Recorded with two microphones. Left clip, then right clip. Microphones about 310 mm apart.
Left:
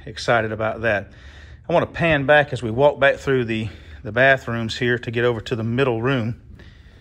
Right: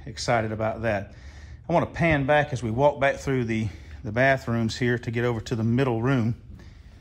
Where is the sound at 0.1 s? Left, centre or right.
Centre.